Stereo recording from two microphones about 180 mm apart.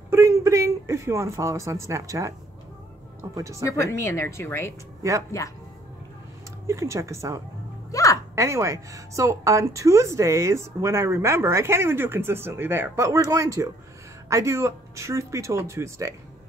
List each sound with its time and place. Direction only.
0.1 s a woman's voice: 15° right (ahead or behind)
3.6 s speech: 15° left (ahead or behind)
6.7 s a woman's voice: 15° right (ahead or behind)
7.9 s music: 20° left (ahead or behind)
8.4 s a woman's voice: 15° right (ahead or behind)